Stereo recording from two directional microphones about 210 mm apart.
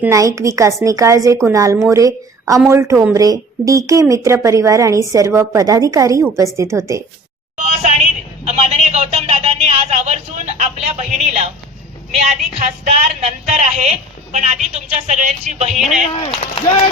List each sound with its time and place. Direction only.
0.0 s a woman's voice: 15° right (ahead or behind)
7.5 s a sound: 35° right (ahead or behind)
12.3 s speech: 30° right (ahead or behind)
16.1 s speech: 25° left (ahead or behind)